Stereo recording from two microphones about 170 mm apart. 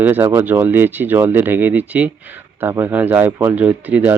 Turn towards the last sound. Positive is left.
turn(degrees=-10)  # may be behind; listen again after turning